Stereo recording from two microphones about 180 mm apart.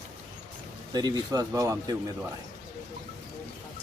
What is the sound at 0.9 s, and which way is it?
Speech, 20° right (ahead or behind).